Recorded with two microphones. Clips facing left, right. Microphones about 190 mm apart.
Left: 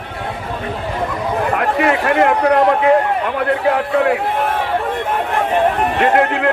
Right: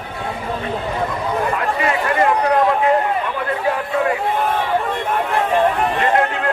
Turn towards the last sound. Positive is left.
turn(degrees=70)  # may be behind; listen again after turning